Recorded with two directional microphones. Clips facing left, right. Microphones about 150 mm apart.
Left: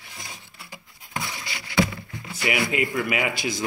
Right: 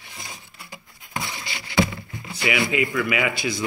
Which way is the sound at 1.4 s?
25° right (ahead or behind).